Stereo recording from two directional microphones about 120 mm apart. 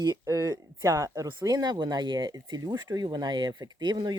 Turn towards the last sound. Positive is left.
turn(degrees=-35)  # may be behind; listen again after turning